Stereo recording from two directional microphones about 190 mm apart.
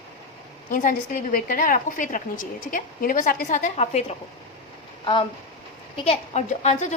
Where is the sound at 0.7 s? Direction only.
45° left (ahead or behind).